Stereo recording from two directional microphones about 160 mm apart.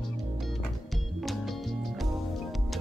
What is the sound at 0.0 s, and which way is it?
Music, centre (ahead or behind).